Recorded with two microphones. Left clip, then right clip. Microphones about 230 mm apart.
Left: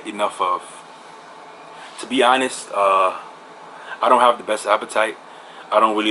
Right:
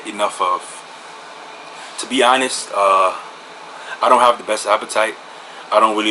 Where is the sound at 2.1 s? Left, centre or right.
Centre.